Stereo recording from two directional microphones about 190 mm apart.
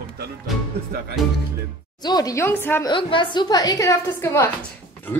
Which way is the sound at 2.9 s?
25° left (ahead or behind).